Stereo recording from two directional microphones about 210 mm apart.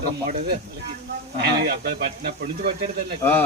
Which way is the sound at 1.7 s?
50° right (ahead or behind).